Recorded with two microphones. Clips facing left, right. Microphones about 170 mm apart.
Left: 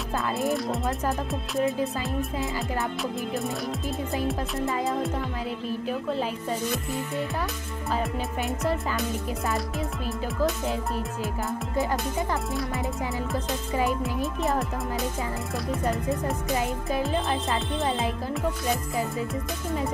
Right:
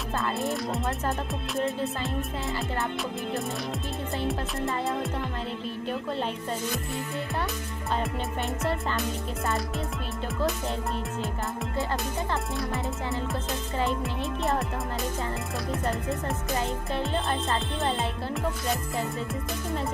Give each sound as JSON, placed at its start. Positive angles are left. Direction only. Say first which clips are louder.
{"t": 0.4, "sound": "music", "louder": "left 3 dB", "side_deg": 0}
{"t": 5.7, "sound": "music", "louder": "left 4 dB", "side_deg": 5}
{"t": 7.9, "sound": "music", "louder": "left 1 dB", "side_deg": 0}
{"t": 10.4, "sound": "music", "louder": "left 2 dB", "side_deg": 0}
{"t": 11.7, "sound": "music", "louder": "left 4 dB", "side_deg": 15}
{"t": 14.0, "sound": "music", "louder": "left 2 dB", "side_deg": 0}